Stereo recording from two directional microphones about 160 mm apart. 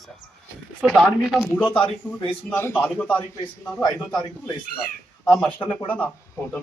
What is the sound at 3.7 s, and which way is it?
Speech, 20° left (ahead or behind).